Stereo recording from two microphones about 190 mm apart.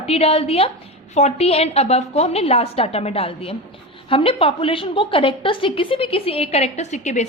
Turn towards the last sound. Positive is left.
turn(degrees=40)  # may be behind; listen again after turning